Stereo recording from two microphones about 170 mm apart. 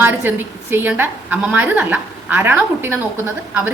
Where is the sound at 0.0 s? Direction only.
10° right (ahead or behind).